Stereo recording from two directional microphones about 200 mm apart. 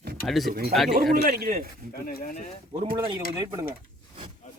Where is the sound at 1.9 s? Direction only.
50° left (ahead or behind).